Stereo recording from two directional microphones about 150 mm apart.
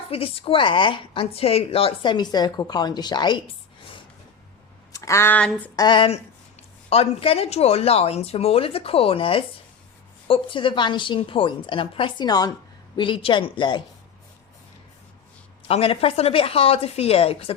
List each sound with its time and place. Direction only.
0.1 s a woman's voice: 40° left (ahead or behind)
4.9 s speech: 20° left (ahead or behind)
5.7 s a woman's voice: 30° left (ahead or behind)
15.6 s a woman's voice: 40° left (ahead or behind)